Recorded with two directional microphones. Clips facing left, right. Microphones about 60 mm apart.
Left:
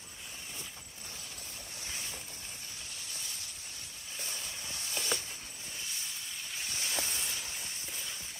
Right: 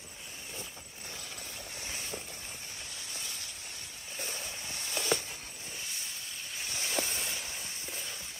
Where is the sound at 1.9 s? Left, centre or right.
Right.